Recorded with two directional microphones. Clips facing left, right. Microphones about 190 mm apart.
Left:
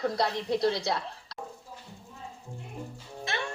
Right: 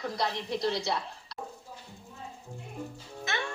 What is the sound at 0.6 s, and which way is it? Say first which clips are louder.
Speech: left 1 dB; 55° left (ahead or behind).